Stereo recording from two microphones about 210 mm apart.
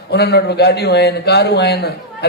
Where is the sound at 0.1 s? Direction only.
50° left (ahead or behind).